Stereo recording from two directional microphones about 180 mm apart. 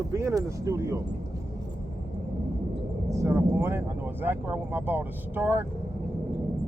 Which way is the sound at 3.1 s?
15° right (ahead or behind).